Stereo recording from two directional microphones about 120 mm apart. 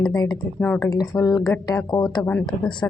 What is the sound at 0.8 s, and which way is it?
Speech, 30° left (ahead or behind).